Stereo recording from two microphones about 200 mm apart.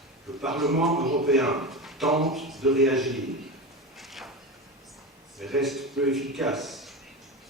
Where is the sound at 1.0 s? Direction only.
45° right (ahead or behind).